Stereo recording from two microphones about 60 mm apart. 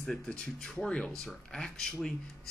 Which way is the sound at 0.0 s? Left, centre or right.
Centre.